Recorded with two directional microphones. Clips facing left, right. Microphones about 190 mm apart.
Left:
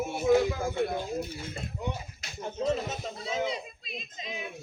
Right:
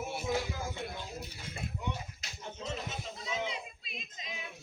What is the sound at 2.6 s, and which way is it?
Speech, 40° left (ahead or behind).